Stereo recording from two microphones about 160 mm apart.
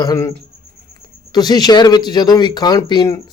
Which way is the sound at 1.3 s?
25° left (ahead or behind).